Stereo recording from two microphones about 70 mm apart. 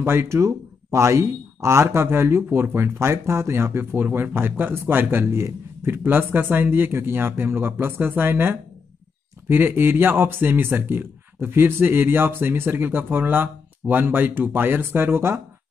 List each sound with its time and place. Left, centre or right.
0.0 s speech: right